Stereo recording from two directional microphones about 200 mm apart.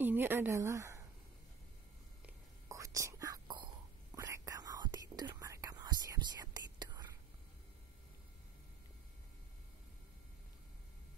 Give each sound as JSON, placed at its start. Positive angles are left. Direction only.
{"t": 0.0, "sound": "a woman's voice", "side_deg": -10}
{"t": 2.2, "sound": "whispering", "side_deg": -15}